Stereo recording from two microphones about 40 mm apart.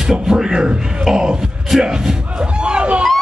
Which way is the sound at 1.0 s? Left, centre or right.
Centre.